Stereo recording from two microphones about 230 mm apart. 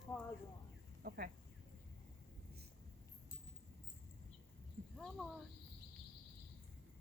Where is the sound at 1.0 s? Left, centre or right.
Right.